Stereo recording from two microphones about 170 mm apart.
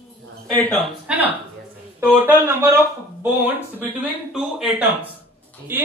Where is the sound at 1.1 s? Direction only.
10° right (ahead or behind).